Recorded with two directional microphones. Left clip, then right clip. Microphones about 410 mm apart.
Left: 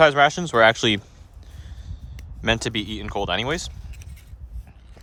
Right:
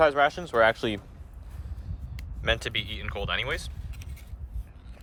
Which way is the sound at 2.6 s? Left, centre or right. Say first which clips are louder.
Left 4 dB; centre.